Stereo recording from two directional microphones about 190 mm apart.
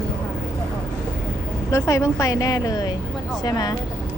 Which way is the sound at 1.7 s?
15° left (ahead or behind).